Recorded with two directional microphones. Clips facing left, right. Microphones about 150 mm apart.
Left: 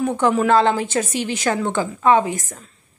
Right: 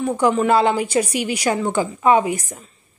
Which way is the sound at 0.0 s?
5° right (ahead or behind).